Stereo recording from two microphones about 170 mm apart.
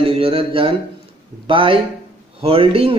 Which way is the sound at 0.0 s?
35° right (ahead or behind).